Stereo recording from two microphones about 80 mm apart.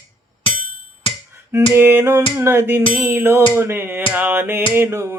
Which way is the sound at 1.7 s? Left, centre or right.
Right.